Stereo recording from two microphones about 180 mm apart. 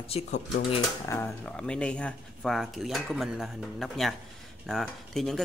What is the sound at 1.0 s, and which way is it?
Speech, 10° left (ahead or behind).